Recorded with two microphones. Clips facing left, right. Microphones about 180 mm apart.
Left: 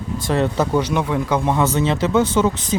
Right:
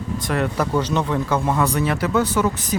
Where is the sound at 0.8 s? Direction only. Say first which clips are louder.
Right 1 dB; 10° left (ahead or behind).